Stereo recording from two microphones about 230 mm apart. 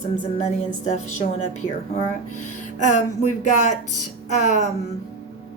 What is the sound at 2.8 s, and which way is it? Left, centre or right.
Speech, left.